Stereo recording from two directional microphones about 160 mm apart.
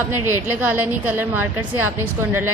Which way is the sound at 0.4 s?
10° right (ahead or behind).